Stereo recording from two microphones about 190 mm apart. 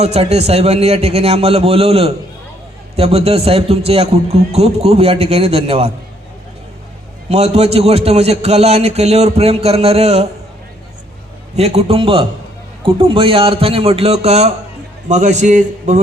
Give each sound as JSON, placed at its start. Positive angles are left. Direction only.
{"t": 0.0, "sound": "a man's voice", "side_deg": -35}
{"t": 7.3, "sound": "a man's voice", "side_deg": -35}
{"t": 11.5, "sound": "a man's voice", "side_deg": -35}